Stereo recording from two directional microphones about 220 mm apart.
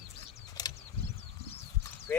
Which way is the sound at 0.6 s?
15° left (ahead or behind).